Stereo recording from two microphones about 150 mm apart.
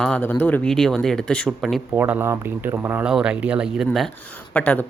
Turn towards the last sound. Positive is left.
turn(degrees=10)  # may be behind; listen again after turning